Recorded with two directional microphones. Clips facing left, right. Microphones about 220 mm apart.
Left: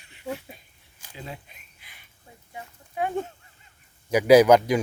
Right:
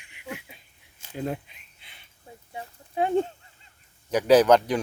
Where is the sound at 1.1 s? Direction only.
55° right (ahead or behind).